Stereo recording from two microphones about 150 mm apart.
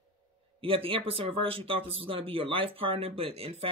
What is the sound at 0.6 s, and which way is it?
Speech, 35° right (ahead or behind).